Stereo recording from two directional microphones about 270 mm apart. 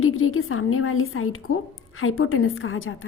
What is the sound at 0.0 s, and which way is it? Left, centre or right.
A woman's voice, left.